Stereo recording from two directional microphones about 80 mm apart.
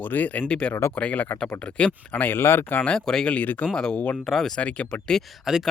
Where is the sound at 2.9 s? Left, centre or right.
Centre.